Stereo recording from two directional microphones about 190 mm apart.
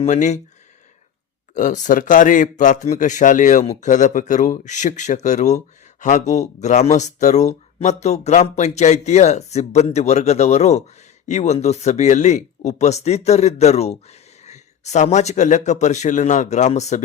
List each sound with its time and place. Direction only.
0.0 s speech: 35° left (ahead or behind)
1.5 s speech: 40° left (ahead or behind)